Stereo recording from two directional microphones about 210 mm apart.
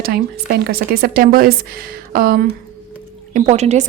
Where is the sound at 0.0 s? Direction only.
45° right (ahead or behind).